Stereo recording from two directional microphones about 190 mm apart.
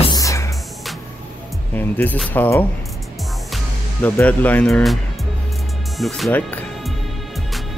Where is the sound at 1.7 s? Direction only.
10° left (ahead or behind).